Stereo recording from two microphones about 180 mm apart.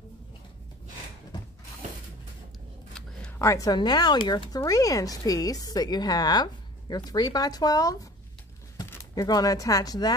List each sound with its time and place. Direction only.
3.3 s speech: 15° left (ahead or behind)